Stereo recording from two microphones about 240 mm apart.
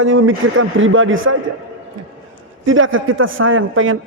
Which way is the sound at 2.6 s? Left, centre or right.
Right.